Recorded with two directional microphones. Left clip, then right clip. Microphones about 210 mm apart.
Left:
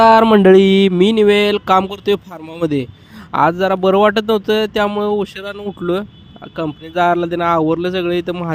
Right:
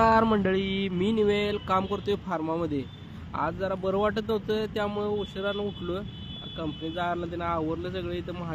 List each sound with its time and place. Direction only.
0.0 s speech: 45° left (ahead or behind)